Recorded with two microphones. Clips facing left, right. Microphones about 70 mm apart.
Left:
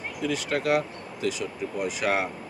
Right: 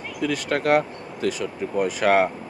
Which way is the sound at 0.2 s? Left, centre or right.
Right.